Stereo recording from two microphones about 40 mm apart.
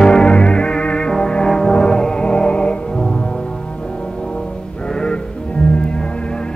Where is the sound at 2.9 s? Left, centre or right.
Centre.